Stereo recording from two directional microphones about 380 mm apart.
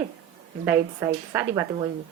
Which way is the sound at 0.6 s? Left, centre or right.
Centre.